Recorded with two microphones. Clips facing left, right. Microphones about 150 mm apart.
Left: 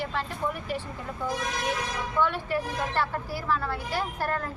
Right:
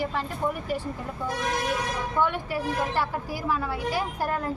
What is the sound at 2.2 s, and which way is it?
A woman's voice, 10° right (ahead or behind).